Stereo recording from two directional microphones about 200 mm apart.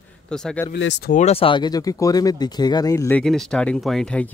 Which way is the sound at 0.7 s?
60° left (ahead or behind).